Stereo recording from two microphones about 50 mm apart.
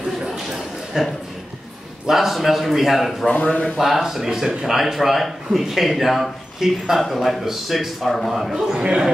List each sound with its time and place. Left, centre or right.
1.0 s speech: centre
3.3 s speech: left
3.7 s speech: centre
8.7 s speech: centre